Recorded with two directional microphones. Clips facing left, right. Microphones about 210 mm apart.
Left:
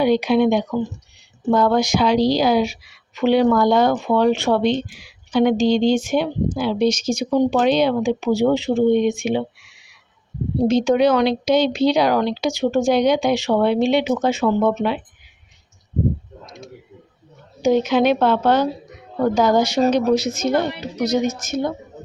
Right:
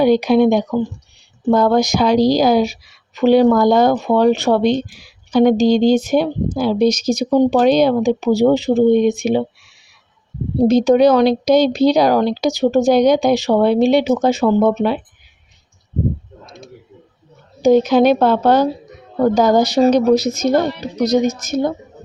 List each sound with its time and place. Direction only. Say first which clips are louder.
0.0 s a woman's voice: right 4 dB; 40° right (ahead or behind)
17.6 s a woman's voice: right 5 dB; 35° right (ahead or behind)